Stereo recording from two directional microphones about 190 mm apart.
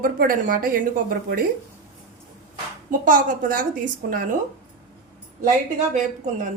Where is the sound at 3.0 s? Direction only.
45° right (ahead or behind).